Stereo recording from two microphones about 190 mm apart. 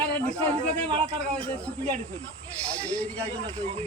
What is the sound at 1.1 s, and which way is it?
Speech, 5° left (ahead or behind).